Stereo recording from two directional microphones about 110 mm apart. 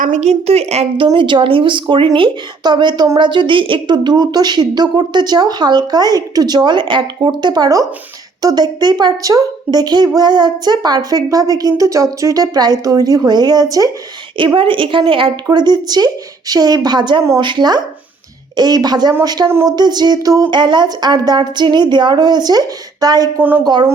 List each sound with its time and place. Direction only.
0.1 s a woman's voice: 90° right; by 0.9 s 75° right (ahead or behind)
0.9 s a woman's voice: 50° right (ahead or behind); by 13.9 s 30° right (ahead or behind)
14.3 s speech: 50° right (ahead or behind)
15.4 s a woman's voice: 40° right (ahead or behind)
20.5 s a woman's voice: 45° right (ahead or behind)